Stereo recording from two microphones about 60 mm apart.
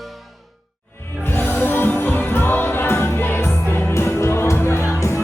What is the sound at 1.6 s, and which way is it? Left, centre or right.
Music, left.